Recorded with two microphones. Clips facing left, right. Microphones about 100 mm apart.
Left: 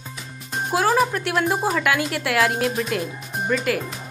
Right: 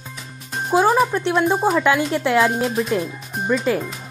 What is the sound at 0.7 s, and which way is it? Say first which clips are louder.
Music: right 4 dB; 25° right (ahead or behind).